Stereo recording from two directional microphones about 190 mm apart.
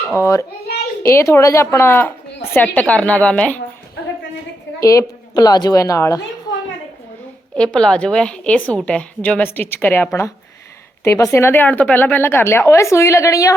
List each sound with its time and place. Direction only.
0.2 s a woman's voice: 15° left (ahead or behind)
4.8 s a woman's voice: 15° left (ahead or behind)
7.5 s a woman's voice: 5° left (ahead or behind)